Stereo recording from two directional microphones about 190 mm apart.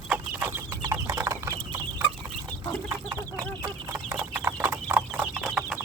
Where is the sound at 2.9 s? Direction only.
15° right (ahead or behind).